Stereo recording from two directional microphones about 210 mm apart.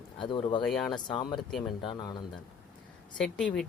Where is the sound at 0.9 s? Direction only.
20° left (ahead or behind).